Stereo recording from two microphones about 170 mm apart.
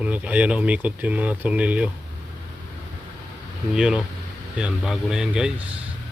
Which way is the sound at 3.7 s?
5° right (ahead or behind).